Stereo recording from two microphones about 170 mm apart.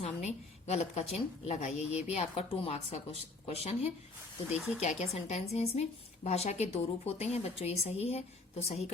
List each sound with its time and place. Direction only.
0.0 s a sound: 40° left (ahead or behind)
1.5 s a woman's voice: 40° left (ahead or behind)
4.5 s speech: 5° right (ahead or behind)
4.8 s a woman's voice: 45° left (ahead or behind)